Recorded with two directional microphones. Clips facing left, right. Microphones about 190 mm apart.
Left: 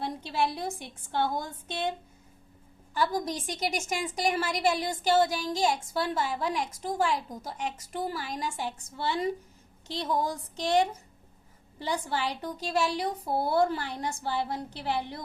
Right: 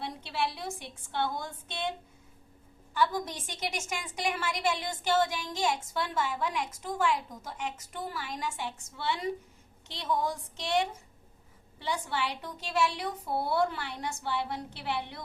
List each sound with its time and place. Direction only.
0.0 s a woman's voice: 40° left (ahead or behind)
2.9 s a woman's voice: 35° left (ahead or behind)